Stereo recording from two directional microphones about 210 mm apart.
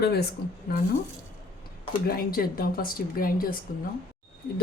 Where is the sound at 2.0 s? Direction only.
45° left (ahead or behind).